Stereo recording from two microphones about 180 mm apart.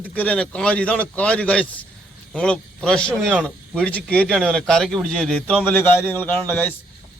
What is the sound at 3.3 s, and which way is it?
Speech, 10° right (ahead or behind).